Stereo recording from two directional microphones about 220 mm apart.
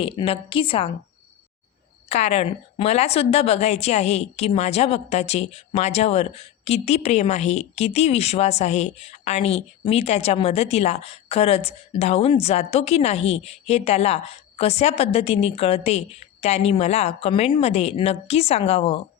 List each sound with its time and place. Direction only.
0.0 s a woman's voice: 25° left (ahead or behind)
2.0 s a woman's voice: 30° left (ahead or behind)